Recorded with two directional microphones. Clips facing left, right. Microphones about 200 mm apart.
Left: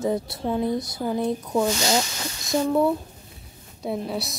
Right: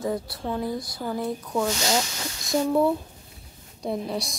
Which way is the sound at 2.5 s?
Centre (ahead or behind).